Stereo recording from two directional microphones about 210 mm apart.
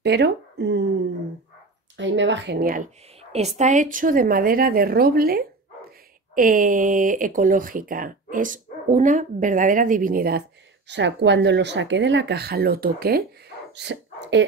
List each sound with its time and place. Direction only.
0.0 s speech: 50° right (ahead or behind)
2.0 s a woman's voice: 60° right (ahead or behind); by 10.4 s 45° right (ahead or behind)
10.9 s speech: 55° right (ahead or behind)
13.7 s speech: 55° right (ahead or behind)